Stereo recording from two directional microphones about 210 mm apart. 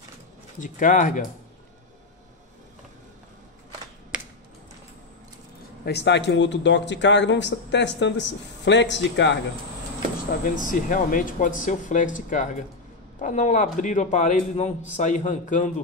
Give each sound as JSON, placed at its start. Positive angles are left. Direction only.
{"t": 0.6, "sound": "a man's voice", "side_deg": 40}
{"t": 5.9, "sound": "speech", "side_deg": 55}
{"t": 10.4, "sound": "a man's voice", "side_deg": 40}